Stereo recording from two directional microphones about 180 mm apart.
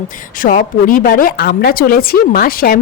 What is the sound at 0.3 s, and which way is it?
Speech, 50° left (ahead or behind).